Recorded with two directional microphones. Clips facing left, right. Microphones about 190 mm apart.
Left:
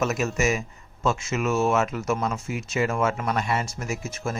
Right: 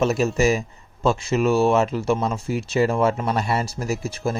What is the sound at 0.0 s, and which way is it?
Speech, 30° right (ahead or behind).